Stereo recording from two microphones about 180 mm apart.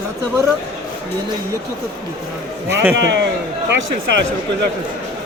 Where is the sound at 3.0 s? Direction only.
70° right (ahead or behind).